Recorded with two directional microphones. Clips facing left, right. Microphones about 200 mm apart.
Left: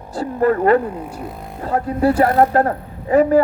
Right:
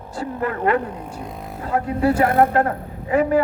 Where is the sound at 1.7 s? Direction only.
35° left (ahead or behind).